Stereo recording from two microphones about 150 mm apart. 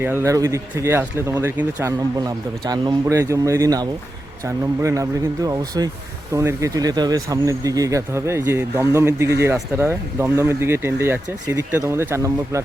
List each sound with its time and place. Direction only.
0.0 s speech: 15° right (ahead or behind)